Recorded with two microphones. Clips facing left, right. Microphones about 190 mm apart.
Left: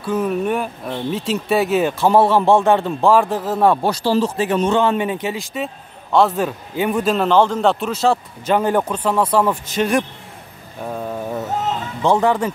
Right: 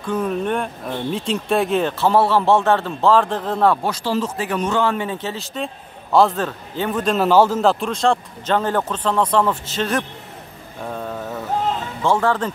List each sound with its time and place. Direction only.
0.0 s speech: 5° left (ahead or behind)
3.7 s a man's voice: 30° left (ahead or behind); by 6.4 s centre (ahead or behind)
6.4 s speech: 10° left (ahead or behind)
7.2 s speech: 5° right (ahead or behind); by 10.0 s 15° left (ahead or behind)
10.8 s mantra: 10° left (ahead or behind)
12.0 s speech: 15° left (ahead or behind)